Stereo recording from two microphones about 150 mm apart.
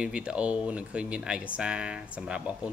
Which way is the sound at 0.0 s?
5° right (ahead or behind).